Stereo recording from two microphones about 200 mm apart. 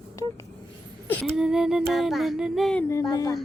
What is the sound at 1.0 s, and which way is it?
Child singing, centre (ahead or behind).